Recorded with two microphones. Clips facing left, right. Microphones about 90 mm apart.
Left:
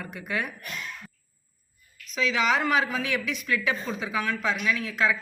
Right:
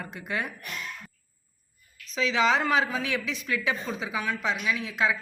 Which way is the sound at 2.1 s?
30° right (ahead or behind).